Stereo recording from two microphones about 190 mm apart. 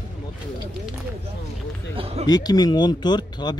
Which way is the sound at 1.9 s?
30° right (ahead or behind).